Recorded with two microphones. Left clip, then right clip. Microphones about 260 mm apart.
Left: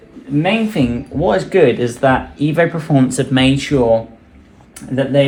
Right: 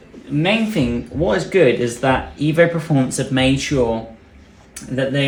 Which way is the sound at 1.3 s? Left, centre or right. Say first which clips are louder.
Left 2 dB; centre.